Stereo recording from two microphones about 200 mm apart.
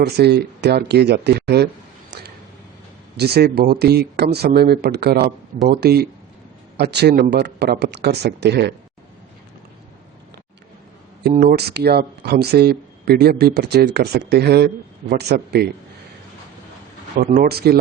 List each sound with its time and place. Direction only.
0.0 s speech: 55° right (ahead or behind)
11.2 s speech: 50° right (ahead or behind)
17.2 s speech: 45° right (ahead or behind)